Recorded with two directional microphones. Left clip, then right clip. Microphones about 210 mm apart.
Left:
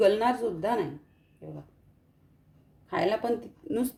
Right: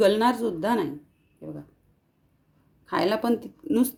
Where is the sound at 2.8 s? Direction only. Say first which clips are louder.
Right 3 dB; 45° right (ahead or behind).